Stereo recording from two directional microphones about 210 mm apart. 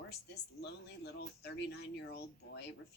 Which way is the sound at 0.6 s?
50° left (ahead or behind).